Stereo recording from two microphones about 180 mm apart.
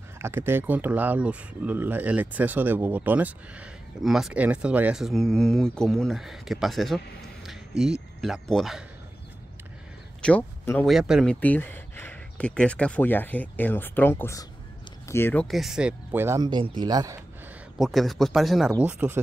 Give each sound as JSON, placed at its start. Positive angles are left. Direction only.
{"t": 0.2, "sound": "speech", "side_deg": -15}
{"t": 10.2, "sound": "speech", "side_deg": 10}
{"t": 10.9, "sound": "speech", "side_deg": -5}
{"t": 11.4, "sound": "speech", "side_deg": 10}
{"t": 15.4, "sound": "speech", "side_deg": 0}
{"t": 17.7, "sound": "speech", "side_deg": 0}